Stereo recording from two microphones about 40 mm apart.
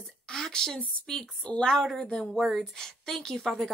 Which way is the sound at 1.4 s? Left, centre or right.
Left.